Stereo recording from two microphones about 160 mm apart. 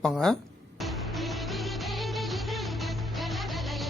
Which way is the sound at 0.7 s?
Centre (ahead or behind).